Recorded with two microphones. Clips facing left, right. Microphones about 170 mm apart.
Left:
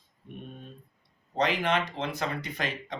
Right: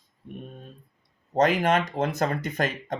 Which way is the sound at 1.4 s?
45° right (ahead or behind).